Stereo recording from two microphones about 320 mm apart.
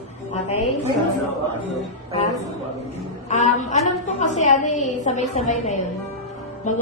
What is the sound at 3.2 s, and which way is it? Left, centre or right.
A woman's voice, left.